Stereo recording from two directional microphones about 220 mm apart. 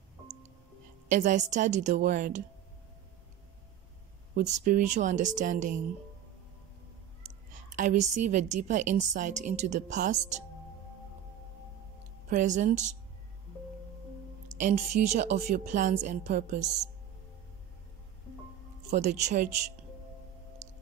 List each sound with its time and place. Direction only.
1.0 s a woman's voice: 35° right (ahead or behind)
4.5 s a woman's voice: 35° right (ahead or behind)
7.7 s a woman's voice: 35° right (ahead or behind)
12.3 s a woman's voice: 35° right (ahead or behind)
14.5 s a woman's voice: 35° right (ahead or behind)
18.9 s a woman's voice: 30° right (ahead or behind)